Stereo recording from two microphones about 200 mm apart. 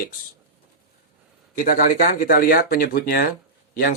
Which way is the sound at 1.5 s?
45° left (ahead or behind).